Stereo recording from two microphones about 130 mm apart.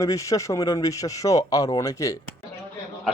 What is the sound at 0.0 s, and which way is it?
A man's voice, 25° left (ahead or behind).